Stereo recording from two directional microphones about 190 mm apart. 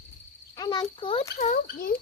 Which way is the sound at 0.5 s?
20° left (ahead or behind).